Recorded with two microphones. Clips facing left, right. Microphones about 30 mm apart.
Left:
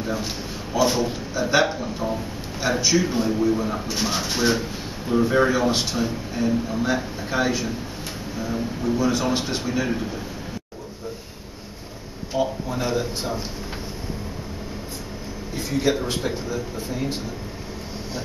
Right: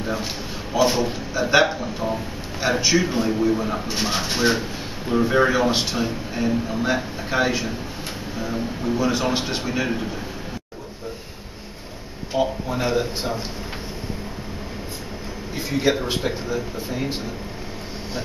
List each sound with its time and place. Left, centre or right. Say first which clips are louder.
0.0 s a man's voice: right 1 dB; centre
12.3 s speech: right 2 dB; centre
15.5 s speech: right 1 dB; centre